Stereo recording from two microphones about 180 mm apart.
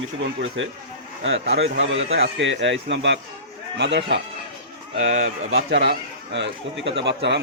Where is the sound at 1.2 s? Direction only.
80° right.